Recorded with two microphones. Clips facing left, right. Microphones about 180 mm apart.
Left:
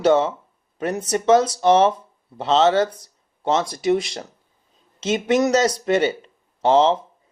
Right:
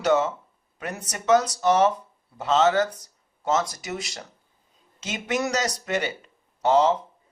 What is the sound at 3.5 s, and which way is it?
Speech, 25° left (ahead or behind).